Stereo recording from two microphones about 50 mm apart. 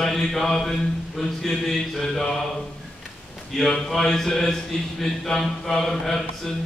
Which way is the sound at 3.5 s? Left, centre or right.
Centre.